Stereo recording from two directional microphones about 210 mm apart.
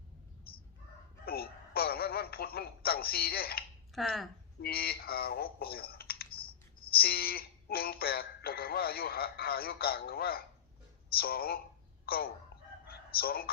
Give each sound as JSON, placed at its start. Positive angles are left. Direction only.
{"t": 1.2, "sound": "a sound", "side_deg": 45}
{"t": 3.9, "sound": "speech", "side_deg": 0}
{"t": 4.6, "sound": "speech", "side_deg": 45}
{"t": 12.9, "sound": "crowing", "side_deg": 45}